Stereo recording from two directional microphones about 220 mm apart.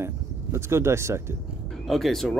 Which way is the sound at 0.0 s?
10° right (ahead or behind).